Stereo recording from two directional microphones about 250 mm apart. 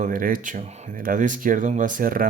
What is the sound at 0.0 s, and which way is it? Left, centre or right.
Speech, right.